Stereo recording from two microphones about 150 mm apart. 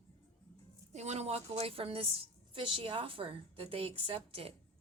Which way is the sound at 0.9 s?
50° right (ahead or behind).